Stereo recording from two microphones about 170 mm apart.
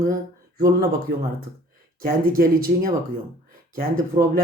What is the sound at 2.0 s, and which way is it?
Speech, 55° right (ahead or behind).